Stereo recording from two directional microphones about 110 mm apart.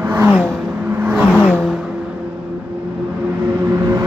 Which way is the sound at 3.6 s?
35° right (ahead or behind).